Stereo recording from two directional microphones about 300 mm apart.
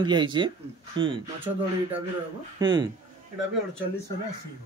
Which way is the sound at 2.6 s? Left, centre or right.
Centre.